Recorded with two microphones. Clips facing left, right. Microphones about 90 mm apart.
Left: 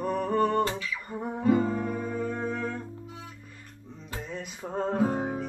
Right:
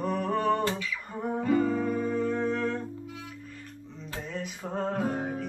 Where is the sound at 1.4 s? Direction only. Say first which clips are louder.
Left 2 dB; 20° left (ahead or behind).